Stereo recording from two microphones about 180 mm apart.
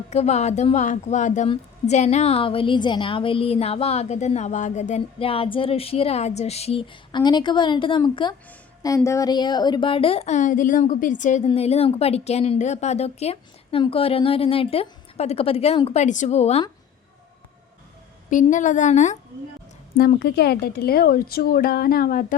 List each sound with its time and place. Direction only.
0.1 s a woman's voice: 35° left (ahead or behind)
18.3 s a woman's voice: 45° left (ahead or behind)
20.0 s speech: 60° left (ahead or behind)